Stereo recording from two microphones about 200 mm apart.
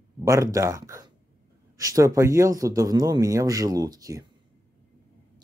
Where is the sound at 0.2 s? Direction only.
15° right (ahead or behind).